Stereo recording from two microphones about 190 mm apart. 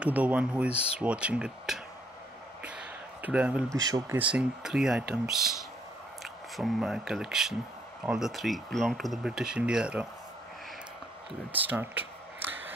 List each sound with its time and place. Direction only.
0.0 s speech: 5° right (ahead or behind)
2.6 s a sound: 5° right (ahead or behind)
3.7 s speech: 20° right (ahead or behind)
4.3 s speech: 5° right (ahead or behind)
6.5 s speech: centre (ahead or behind)
11.5 s speech: 10° right (ahead or behind)